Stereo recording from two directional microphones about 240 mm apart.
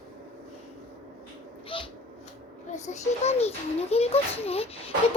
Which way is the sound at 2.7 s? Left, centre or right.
Left.